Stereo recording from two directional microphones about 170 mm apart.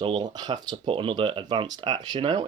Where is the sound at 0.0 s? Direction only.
25° right (ahead or behind).